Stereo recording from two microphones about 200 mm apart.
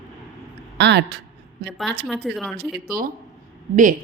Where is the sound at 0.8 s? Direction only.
60° right (ahead or behind).